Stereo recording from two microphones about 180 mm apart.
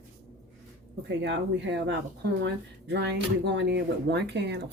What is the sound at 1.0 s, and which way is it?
Speech, 75° right (ahead or behind).